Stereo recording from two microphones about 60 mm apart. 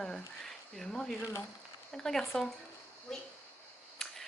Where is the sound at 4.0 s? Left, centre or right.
Centre.